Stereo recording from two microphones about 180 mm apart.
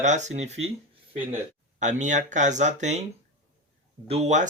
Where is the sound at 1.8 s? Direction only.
40° right (ahead or behind).